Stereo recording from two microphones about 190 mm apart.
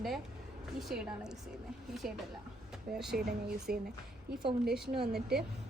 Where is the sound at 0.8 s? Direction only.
Centre (ahead or behind).